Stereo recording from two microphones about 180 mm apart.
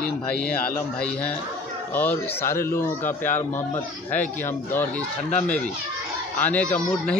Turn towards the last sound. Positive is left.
turn(degrees=10)  # may be behind; listen again after turning